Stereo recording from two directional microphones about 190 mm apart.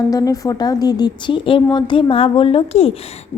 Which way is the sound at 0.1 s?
20° left (ahead or behind).